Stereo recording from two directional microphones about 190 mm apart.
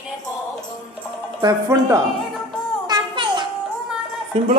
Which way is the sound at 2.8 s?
25° right (ahead or behind).